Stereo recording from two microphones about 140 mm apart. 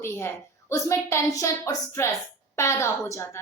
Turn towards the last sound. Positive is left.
turn(degrees=20)  # may be behind; listen again after turning